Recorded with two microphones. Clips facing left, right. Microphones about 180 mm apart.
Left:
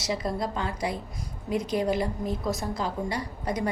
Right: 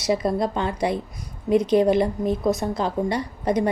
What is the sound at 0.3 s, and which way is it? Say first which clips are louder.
A woman's voice: right 7 dB; 25° right (ahead or behind).